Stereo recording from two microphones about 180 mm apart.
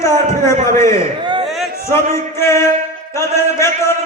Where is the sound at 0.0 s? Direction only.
15° left (ahead or behind).